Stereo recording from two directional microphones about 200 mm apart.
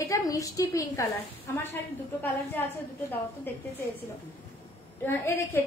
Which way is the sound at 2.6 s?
10° left (ahead or behind).